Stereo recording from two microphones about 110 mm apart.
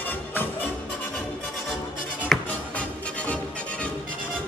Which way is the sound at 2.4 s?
10° left (ahead or behind).